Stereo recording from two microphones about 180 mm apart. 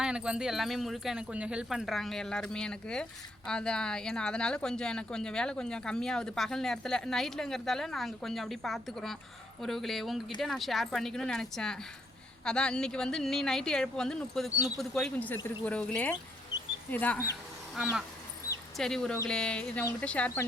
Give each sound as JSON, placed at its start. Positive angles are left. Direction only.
{"t": 0.0, "sound": "speech", "side_deg": -5}
{"t": 18.8, "sound": "speech", "side_deg": 5}